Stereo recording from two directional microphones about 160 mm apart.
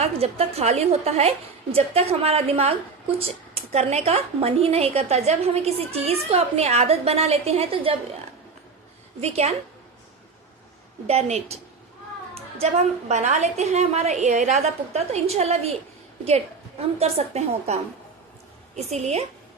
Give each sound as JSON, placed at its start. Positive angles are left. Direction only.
{"t": 0.0, "sound": "a woman's voice", "side_deg": -40}
{"t": 9.2, "sound": "a woman's voice", "side_deg": -40}
{"t": 11.0, "sound": "a woman's voice", "side_deg": -40}
{"t": 17.0, "sound": "a woman's voice", "side_deg": -40}
{"t": 18.8, "sound": "a woman's voice", "side_deg": -45}